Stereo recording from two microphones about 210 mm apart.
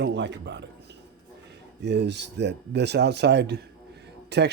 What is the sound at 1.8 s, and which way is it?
Speech, 55° right (ahead or behind).